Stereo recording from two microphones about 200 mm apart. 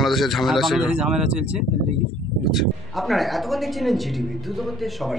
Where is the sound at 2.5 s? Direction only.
Centre (ahead or behind).